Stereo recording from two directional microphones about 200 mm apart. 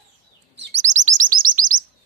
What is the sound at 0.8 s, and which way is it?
Chirp, 35° right (ahead or behind).